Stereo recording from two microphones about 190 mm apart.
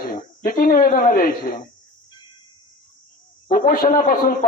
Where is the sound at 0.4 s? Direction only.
45° left (ahead or behind).